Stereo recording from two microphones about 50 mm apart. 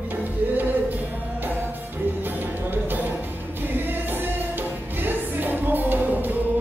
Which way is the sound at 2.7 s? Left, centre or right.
Right.